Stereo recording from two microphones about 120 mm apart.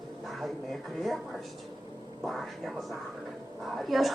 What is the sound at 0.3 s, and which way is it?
Speech, centre (ahead or behind).